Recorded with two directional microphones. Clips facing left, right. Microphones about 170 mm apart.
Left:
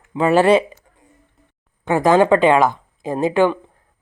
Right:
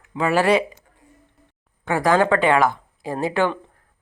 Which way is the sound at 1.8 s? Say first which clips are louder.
Left 4 dB; 20° left (ahead or behind).